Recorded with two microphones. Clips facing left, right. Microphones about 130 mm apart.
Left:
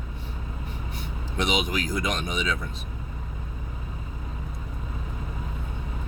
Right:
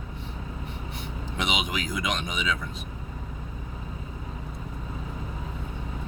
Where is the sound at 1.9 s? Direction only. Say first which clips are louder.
Left 2 dB; 35° left (ahead or behind).